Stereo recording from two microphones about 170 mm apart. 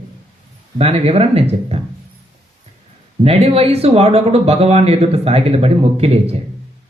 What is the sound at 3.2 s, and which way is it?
Speech, 35° right (ahead or behind).